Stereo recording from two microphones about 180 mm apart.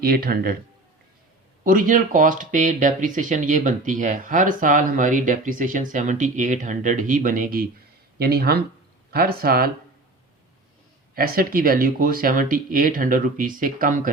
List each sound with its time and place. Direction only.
0.0 s speech: 55° right (ahead or behind)
1.6 s speech: 50° right (ahead or behind)
11.1 s speech: 55° right (ahead or behind)